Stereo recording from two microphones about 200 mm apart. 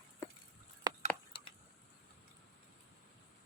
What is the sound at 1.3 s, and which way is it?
Tick, 25° left (ahead or behind).